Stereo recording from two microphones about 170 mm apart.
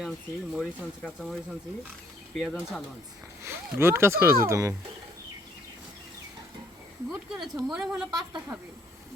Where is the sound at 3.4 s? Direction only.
15° right (ahead or behind).